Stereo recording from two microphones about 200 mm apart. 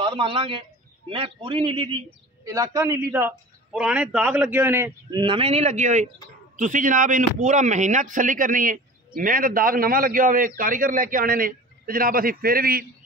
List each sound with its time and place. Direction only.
0.0 s a man's voice: 25° right (ahead or behind)
5.2 s a man's voice: 25° right (ahead or behind); by 12.8 s 50° right (ahead or behind)